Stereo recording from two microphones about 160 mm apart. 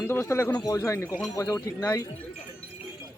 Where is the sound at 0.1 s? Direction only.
15° left (ahead or behind).